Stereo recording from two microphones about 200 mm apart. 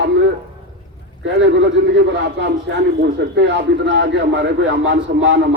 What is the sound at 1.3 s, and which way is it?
A man's voice, 60° right (ahead or behind).